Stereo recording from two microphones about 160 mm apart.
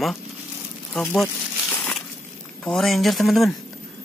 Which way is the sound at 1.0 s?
5° left (ahead or behind).